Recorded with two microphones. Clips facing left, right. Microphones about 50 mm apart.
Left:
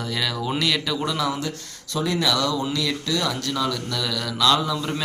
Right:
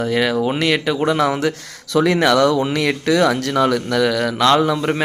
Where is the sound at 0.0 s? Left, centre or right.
Right.